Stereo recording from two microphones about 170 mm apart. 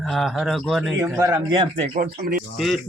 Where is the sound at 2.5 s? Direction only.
Centre (ahead or behind).